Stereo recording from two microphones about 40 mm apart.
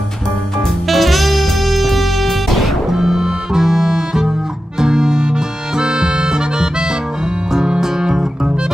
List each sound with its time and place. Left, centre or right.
0.8 s music: centre
2.9 s music: centre